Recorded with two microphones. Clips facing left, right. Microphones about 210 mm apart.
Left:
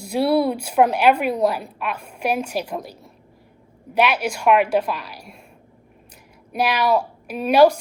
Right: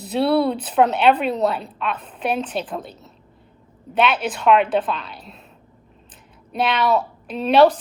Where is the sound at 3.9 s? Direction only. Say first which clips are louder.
Even; 10° left (ahead or behind).